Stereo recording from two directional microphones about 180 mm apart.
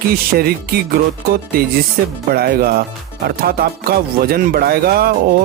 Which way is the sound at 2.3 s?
60° right (ahead or behind).